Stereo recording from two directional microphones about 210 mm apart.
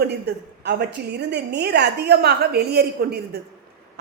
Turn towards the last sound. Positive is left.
turn(degrees=-50)  # may be behind; listen again after turning